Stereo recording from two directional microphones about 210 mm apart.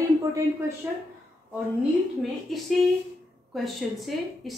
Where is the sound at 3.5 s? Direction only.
Centre (ahead or behind).